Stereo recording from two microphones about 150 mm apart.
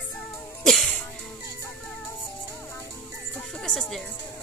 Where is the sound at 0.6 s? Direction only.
5° left (ahead or behind).